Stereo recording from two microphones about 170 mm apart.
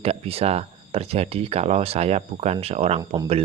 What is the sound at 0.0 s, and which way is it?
Speech, 35° right (ahead or behind).